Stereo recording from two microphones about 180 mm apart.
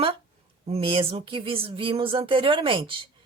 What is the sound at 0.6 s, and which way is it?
Speech, 30° right (ahead or behind).